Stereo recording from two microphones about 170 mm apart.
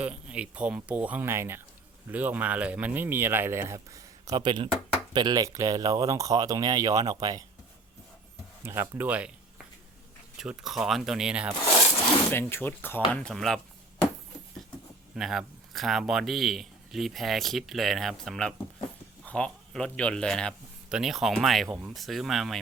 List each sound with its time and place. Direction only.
0.0 s speech: 5° right (ahead or behind); by 7.4 s 25° right (ahead or behind)
8.6 s speech: 15° right (ahead or behind)
10.3 s speech: 5° right (ahead or behind)
11.9 s wood: 25° left (ahead or behind)
12.3 s speech: 15° left (ahead or behind)
15.1 s speech: centre (ahead or behind)